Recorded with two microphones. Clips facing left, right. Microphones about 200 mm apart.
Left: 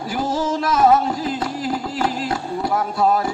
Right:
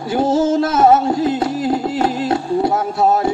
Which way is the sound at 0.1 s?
25° right (ahead or behind).